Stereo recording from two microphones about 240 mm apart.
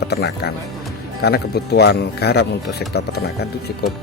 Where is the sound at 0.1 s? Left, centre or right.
Left.